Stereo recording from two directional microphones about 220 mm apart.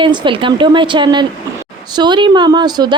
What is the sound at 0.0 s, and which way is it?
Speech, 20° right (ahead or behind).